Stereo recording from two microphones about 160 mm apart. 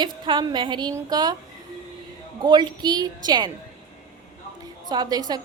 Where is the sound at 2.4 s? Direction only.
25° right (ahead or behind).